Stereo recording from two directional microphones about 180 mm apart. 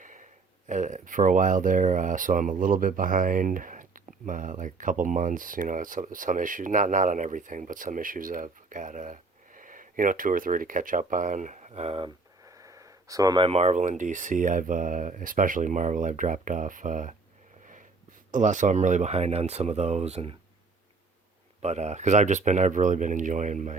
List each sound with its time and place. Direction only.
0.0 s a sound: 45° right (ahead or behind)
0.7 s speech: 45° right (ahead or behind)
18.3 s speech: 45° right (ahead or behind)
21.6 s speech: 40° right (ahead or behind)